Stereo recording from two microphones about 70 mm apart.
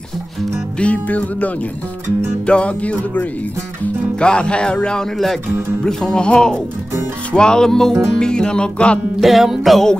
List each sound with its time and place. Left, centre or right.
0.7 s music: centre
9.2 s music: centre